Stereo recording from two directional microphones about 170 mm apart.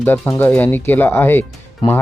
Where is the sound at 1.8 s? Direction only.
25° left (ahead or behind).